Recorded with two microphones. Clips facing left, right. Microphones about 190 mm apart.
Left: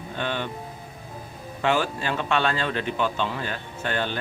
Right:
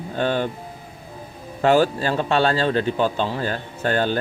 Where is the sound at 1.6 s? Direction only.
35° right (ahead or behind).